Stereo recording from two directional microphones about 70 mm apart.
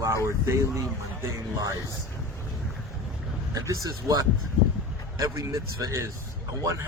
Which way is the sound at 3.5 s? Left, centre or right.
Right.